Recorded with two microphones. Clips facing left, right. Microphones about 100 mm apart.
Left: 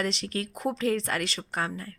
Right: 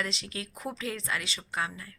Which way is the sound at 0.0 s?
55° left (ahead or behind).